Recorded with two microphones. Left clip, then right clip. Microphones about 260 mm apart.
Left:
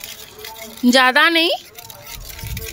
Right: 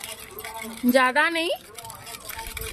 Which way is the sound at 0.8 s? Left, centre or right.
Left.